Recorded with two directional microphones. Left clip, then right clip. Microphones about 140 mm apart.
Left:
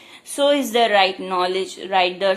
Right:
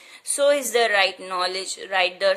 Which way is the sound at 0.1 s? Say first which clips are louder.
Left 1 dB; 50° right (ahead or behind).